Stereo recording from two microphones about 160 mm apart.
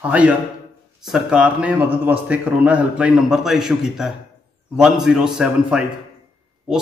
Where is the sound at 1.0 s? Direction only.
5° right (ahead or behind).